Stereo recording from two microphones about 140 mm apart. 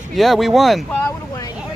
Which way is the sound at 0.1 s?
Centre (ahead or behind).